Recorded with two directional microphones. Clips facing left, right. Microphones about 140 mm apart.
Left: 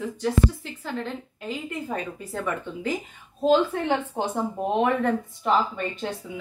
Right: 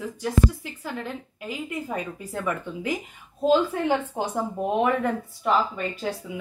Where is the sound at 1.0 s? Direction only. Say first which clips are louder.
Left 1 dB; 10° right (ahead or behind).